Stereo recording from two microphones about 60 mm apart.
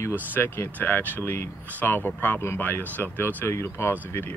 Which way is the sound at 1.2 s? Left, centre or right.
Left.